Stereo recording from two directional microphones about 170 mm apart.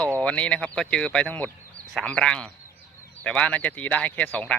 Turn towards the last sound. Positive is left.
turn(degrees=10)  # may be behind; listen again after turning